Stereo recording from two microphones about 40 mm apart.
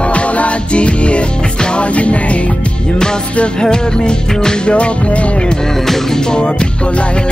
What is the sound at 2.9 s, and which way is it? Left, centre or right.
Music, centre.